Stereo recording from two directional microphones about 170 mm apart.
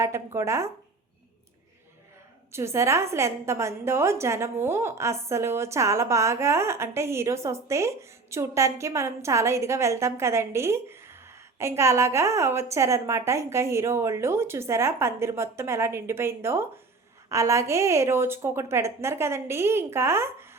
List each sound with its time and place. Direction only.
0.0 s a woman's voice: 15° right (ahead or behind)
2.5 s a woman's voice: 15° right (ahead or behind)